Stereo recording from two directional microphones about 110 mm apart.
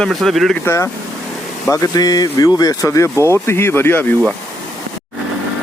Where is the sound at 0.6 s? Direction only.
25° left (ahead or behind).